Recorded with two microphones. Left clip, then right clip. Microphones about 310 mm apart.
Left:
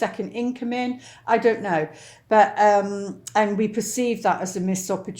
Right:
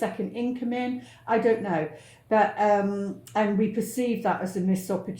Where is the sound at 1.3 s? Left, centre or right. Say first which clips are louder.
Left 4 dB; left.